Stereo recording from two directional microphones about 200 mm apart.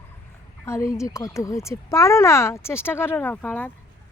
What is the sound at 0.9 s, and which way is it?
Speech, 15° left (ahead or behind).